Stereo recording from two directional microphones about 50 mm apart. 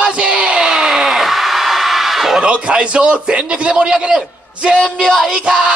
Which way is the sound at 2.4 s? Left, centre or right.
Centre.